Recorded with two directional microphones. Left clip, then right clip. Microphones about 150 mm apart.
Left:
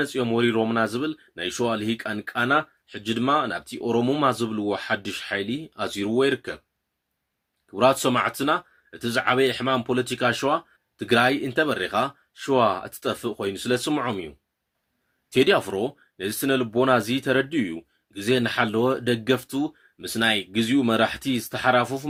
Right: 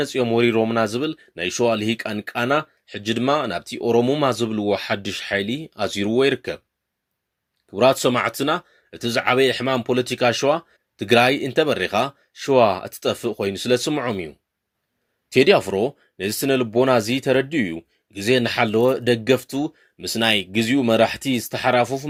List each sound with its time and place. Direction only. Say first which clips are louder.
0.0 s speech: right 4 dB; 40° right (ahead or behind)
7.7 s speech: right 3 dB; 35° right (ahead or behind)
15.3 s speech: right 4 dB; 35° right (ahead or behind)